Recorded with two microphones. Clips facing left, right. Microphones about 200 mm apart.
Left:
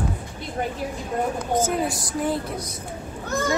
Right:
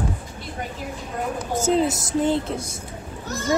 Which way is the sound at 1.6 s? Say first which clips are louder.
Right 4 dB; 25° right (ahead or behind).